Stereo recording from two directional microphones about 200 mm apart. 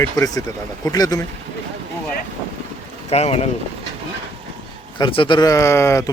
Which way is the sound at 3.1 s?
30° left (ahead or behind).